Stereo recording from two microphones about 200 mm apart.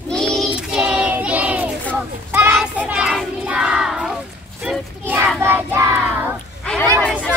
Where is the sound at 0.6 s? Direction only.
5° right (ahead or behind).